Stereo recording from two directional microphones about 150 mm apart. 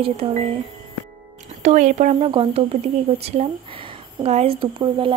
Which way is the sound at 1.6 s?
50° right (ahead or behind).